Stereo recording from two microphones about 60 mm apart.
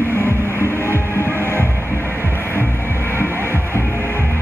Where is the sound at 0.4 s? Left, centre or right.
Left.